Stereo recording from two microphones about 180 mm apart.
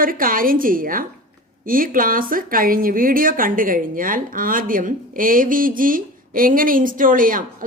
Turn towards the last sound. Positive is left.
turn(degrees=-50)  # may be behind; listen again after turning